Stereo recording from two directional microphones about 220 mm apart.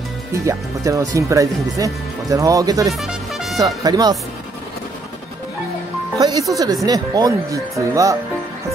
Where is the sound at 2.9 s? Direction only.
Centre (ahead or behind).